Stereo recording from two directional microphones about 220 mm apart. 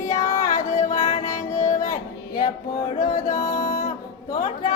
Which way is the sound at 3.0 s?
40° left (ahead or behind).